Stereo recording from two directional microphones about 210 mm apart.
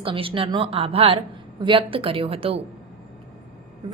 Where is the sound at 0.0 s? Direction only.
25° right (ahead or behind).